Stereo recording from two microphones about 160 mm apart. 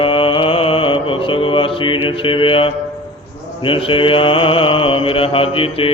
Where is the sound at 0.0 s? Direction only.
30° left (ahead or behind).